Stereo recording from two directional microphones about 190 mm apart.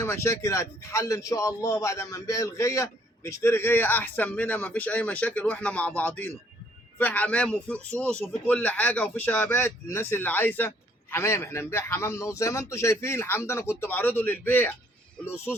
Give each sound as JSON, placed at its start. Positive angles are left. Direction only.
{"t": 0.0, "sound": "a man's voice", "side_deg": 15}